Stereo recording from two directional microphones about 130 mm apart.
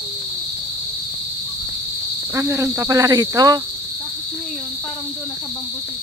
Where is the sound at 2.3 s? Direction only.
25° right (ahead or behind).